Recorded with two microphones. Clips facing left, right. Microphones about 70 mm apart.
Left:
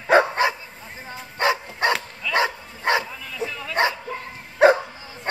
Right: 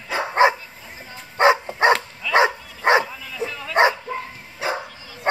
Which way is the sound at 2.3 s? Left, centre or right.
Right.